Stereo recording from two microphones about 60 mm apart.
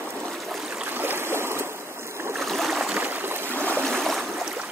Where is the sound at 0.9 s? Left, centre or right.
Right.